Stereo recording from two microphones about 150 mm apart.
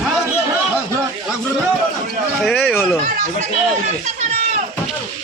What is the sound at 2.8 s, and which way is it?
Speech, 15° left (ahead or behind).